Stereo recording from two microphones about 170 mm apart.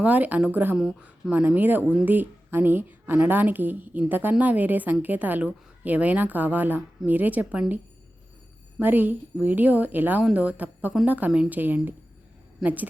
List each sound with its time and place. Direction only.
0.0 s speech: 10° right (ahead or behind)
8.8 s a woman's voice: 10° right (ahead or behind)